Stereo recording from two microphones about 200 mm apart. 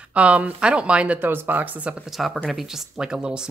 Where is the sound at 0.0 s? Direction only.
5° right (ahead or behind).